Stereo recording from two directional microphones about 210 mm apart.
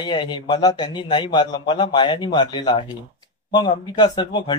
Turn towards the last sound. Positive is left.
turn(degrees=20)  # may be behind; listen again after turning